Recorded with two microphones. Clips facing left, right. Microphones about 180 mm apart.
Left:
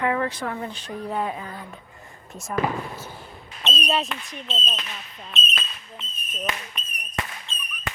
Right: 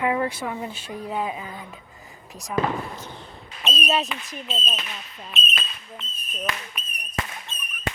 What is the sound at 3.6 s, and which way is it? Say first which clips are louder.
Speech: right 1 dB; centre (ahead or behind).